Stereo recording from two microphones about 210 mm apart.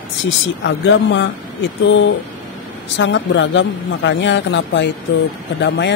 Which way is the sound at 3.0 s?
60° left (ahead or behind).